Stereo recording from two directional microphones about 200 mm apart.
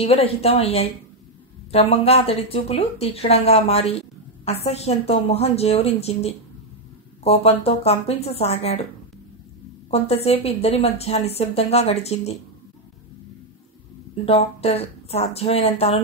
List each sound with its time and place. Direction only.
0.0 s a woman's voice: 30° left (ahead or behind)
9.8 s a woman's voice: 30° left (ahead or behind)
14.2 s a woman's voice: 30° left (ahead or behind)